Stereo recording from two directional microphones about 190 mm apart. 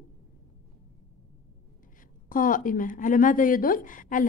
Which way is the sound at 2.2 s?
45° left (ahead or behind).